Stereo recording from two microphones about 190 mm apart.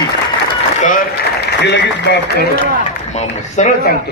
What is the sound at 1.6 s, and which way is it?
Speech, 65° left (ahead or behind).